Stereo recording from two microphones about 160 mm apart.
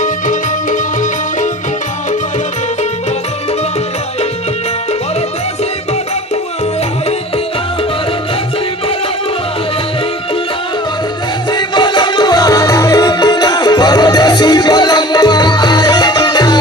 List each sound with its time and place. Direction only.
0.0 s music: 55° left (ahead or behind)
11.5 s music: 30° left (ahead or behind)